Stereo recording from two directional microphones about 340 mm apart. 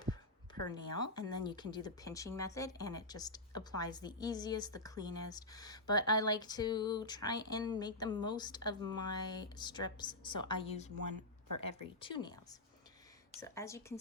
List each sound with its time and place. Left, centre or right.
0.7 s speech: centre
10.9 s speech: left
11.9 s speech: centre